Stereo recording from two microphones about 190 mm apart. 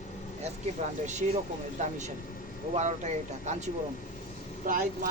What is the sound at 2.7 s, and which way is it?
Speech, 40° right (ahead or behind).